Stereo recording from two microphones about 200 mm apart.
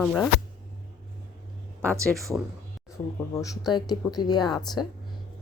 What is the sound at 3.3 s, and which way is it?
Speech, 15° left (ahead or behind).